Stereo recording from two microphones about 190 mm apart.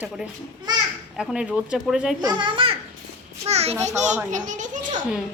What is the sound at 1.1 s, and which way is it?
A woman's voice, 5° right (ahead or behind).